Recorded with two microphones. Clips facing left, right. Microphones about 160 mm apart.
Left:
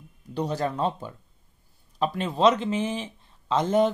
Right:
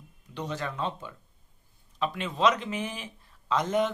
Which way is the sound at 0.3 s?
35° left (ahead or behind).